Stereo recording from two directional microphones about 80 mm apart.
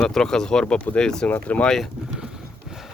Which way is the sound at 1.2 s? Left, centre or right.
Centre.